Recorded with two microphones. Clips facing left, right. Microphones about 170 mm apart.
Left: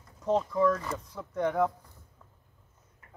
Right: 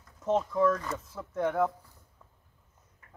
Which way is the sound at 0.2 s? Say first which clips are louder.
Even; centre (ahead or behind).